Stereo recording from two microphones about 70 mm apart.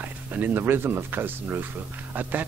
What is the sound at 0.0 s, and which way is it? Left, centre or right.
Speech, right.